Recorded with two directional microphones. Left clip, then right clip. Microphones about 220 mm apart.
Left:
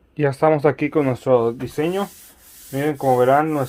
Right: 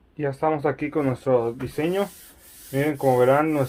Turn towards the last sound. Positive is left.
turn(degrees=25)  # may be behind; listen again after turning